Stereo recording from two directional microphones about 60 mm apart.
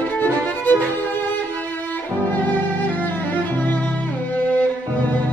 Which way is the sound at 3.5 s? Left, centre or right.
Left.